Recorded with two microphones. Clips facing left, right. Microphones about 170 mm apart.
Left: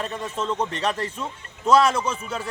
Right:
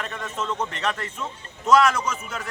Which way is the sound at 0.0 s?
30° left (ahead or behind).